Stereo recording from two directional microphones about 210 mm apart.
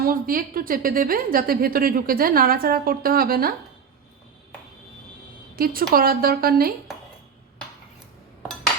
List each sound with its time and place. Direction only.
0.0 s a woman's voice: 40° right (ahead or behind)
5.5 s a woman's voice: 45° right (ahead or behind)